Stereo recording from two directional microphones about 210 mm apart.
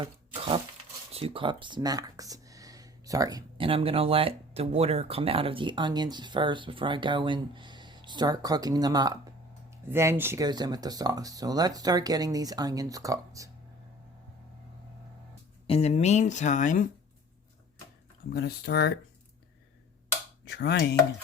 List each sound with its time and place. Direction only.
0.0 s a sound: 25° right (ahead or behind)
1.1 s speech: 25° right (ahead or behind)
15.6 s speech: 30° left (ahead or behind)
18.3 s speech: 50° left (ahead or behind)
20.4 s speech: 55° left (ahead or behind)